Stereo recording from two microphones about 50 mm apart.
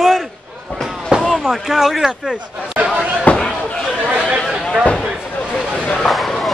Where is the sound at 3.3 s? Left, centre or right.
Left.